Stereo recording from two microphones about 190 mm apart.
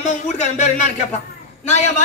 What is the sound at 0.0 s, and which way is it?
Speech, 40° left (ahead or behind).